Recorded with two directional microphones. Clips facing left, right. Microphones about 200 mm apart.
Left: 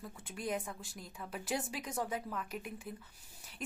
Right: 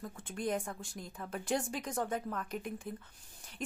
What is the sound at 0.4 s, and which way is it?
Speech, centre (ahead or behind).